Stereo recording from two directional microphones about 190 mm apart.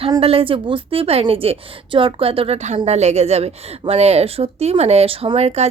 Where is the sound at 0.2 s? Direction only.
30° right (ahead or behind).